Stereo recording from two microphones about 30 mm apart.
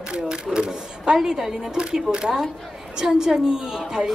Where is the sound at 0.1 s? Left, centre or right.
Right.